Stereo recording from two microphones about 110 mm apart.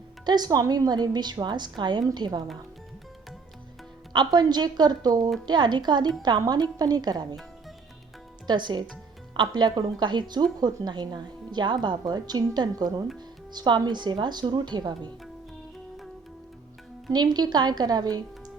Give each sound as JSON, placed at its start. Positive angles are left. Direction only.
{"t": 0.3, "sound": "a woman's voice", "side_deg": -40}
{"t": 4.1, "sound": "a woman's voice", "side_deg": -40}
{"t": 8.4, "sound": "a woman's voice", "side_deg": -45}
{"t": 17.1, "sound": "a woman's voice", "side_deg": -40}